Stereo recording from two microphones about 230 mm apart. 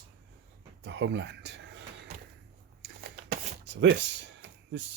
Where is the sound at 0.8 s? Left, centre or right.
Right.